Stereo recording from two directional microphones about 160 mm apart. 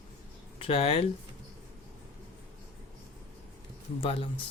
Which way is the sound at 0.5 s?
35° left (ahead or behind).